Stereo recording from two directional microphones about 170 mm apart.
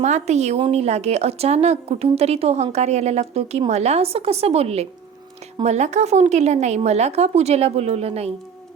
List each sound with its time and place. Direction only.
0.0 s a woman's voice: 40° right (ahead or behind)